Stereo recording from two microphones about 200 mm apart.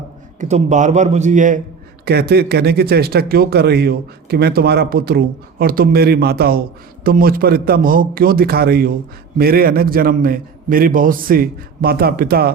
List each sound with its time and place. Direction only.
0.3 s a man's voice: 35° right (ahead or behind)
2.0 s speech: 55° right (ahead or behind)